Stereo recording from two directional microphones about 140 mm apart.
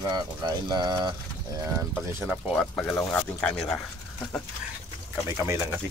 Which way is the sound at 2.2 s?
Centre (ahead or behind).